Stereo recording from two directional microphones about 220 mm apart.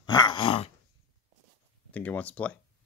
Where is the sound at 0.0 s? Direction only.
20° left (ahead or behind).